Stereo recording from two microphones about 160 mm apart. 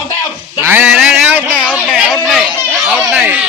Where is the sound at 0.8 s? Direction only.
5° right (ahead or behind).